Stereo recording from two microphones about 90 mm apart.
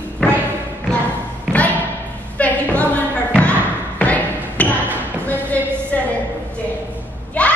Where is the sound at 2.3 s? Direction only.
15° left (ahead or behind).